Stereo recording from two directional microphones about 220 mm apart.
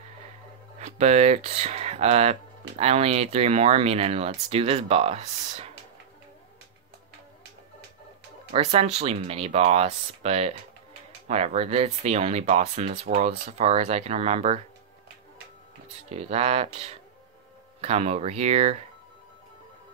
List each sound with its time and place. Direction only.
0.7 s speech: 30° right (ahead or behind)
8.5 s speech: 30° right (ahead or behind)
16.1 s speech: 30° right (ahead or behind)